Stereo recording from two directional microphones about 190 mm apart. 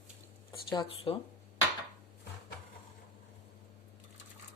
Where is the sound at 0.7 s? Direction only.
25° left (ahead or behind).